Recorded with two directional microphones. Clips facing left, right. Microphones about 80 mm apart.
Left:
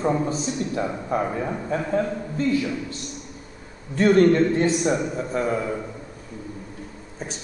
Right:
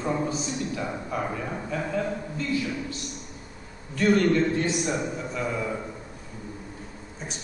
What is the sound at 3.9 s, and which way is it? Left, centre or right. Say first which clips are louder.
A man's voice: left 5 dB; left.